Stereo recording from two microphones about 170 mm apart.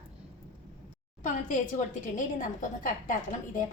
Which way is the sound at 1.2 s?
50° left (ahead or behind).